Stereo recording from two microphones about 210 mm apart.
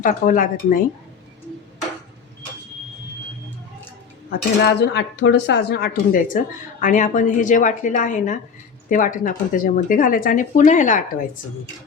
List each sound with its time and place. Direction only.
0.0 s speech: 40° left (ahead or behind)
4.3 s speech: 50° left (ahead or behind)